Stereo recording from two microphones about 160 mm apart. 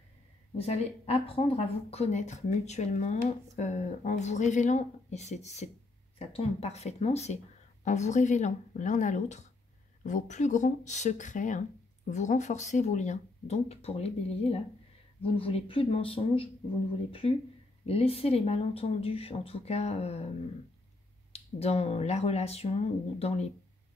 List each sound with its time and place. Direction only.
0.6 s speech: 40° left (ahead or behind)
21.3 s speech: 40° left (ahead or behind)